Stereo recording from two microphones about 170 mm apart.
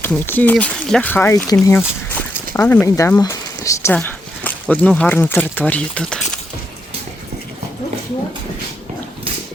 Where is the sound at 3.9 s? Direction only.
10° left (ahead or behind).